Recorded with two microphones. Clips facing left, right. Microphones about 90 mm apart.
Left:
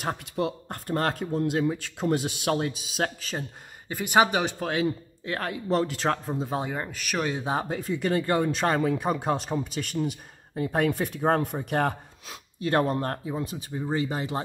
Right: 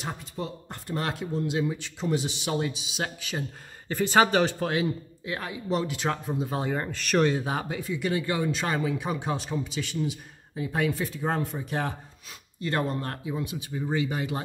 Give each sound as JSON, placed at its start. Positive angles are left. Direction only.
{"t": 0.0, "sound": "speech", "side_deg": 70}
{"t": 0.7, "sound": "speech", "side_deg": 50}
{"t": 3.9, "sound": "speech", "side_deg": 15}
{"t": 5.3, "sound": "speech", "side_deg": 50}
{"t": 6.7, "sound": "speech", "side_deg": 5}
{"t": 7.3, "sound": "speech", "side_deg": 30}
{"t": 7.8, "sound": "speech", "side_deg": 45}
{"t": 12.9, "sound": "speech", "side_deg": 35}